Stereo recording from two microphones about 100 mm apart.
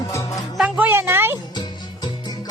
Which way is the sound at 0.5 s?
15° right (ahead or behind).